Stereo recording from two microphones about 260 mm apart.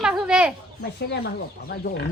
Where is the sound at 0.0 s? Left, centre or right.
Centre.